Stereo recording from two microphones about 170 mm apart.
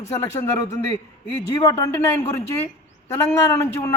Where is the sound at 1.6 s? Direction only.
20° left (ahead or behind).